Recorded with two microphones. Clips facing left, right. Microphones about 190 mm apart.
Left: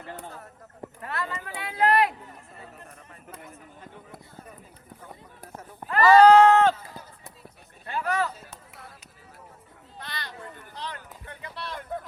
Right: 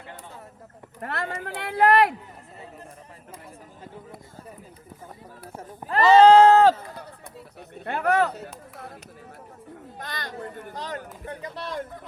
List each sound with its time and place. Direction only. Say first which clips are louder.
1.0 s speech: right 3 dB; 60° right (ahead or behind)
5.9 s a sound: right 1 dB; 25° right (ahead or behind)
7.9 s speech: right 5 dB; 60° right (ahead or behind)
10.0 s speech: right 4 dB; 45° right (ahead or behind)